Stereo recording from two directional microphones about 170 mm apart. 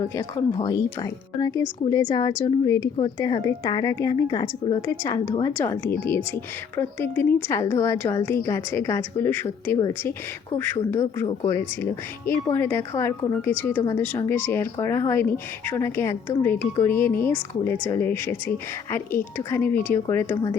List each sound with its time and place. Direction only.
0.2 s a woman's voice: 25° left (ahead or behind)
11.4 s speech: 15° left (ahead or behind)